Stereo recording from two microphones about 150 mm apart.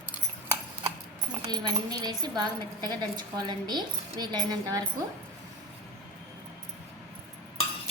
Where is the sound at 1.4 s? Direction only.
25° right (ahead or behind).